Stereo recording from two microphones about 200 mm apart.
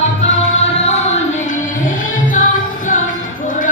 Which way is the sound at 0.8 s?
35° left (ahead or behind).